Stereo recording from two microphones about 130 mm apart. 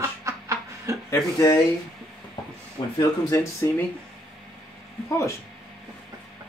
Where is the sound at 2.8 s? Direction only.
40° left (ahead or behind).